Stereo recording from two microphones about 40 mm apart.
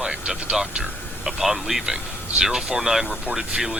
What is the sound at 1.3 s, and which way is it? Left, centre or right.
Speech, centre.